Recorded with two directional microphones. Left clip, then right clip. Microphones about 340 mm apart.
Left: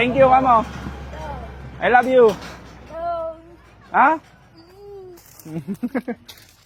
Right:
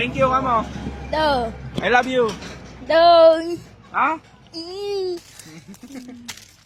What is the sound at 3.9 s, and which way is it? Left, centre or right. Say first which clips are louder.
Speech: left 5 dB; left.